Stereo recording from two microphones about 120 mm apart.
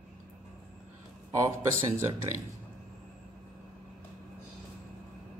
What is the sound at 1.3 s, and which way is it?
Speech, 25° right (ahead or behind).